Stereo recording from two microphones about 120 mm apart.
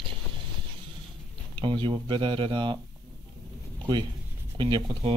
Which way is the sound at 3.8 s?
40° right (ahead or behind).